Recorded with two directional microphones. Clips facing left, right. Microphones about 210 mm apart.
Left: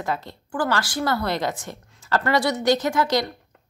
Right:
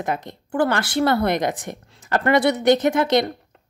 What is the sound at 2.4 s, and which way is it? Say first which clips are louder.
Speech: right 4 dB; 60° right (ahead or behind).